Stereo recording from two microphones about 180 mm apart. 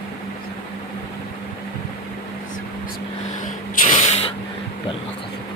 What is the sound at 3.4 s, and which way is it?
Spray, 45° left (ahead or behind).